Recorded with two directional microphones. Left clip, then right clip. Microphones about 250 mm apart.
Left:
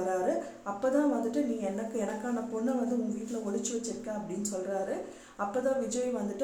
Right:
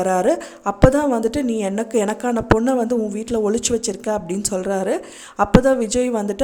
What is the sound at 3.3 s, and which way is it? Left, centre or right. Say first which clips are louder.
A woman's voice: right 17 dB; right.